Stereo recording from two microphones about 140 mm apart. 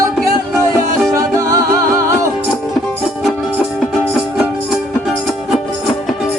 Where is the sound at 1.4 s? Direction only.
25° right (ahead or behind).